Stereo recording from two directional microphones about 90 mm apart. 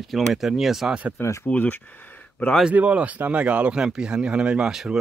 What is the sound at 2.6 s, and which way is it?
Speech, 10° right (ahead or behind).